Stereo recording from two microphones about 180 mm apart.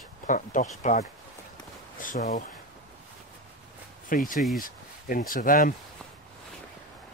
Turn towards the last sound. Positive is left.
turn(degrees=50)  # may be behind; listen again after turning